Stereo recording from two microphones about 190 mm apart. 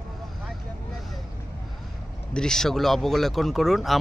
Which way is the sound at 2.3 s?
5° left (ahead or behind).